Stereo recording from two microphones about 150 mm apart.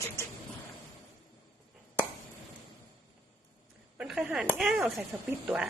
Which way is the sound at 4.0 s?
5° right (ahead or behind).